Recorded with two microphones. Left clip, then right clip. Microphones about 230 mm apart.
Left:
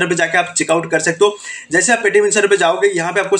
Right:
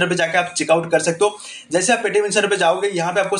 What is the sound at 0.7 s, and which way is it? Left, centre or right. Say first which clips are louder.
A man's voice: right 2 dB; left.